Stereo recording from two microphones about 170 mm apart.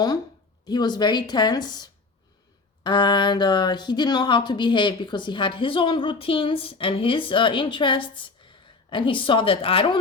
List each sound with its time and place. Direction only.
0.6 s speech: 25° left (ahead or behind)